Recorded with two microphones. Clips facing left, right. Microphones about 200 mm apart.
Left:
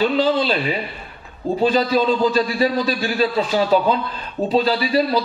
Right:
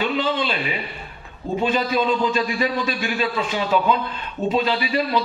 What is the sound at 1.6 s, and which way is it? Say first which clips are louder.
A man's voice: left 4 dB; 35° left (ahead or behind).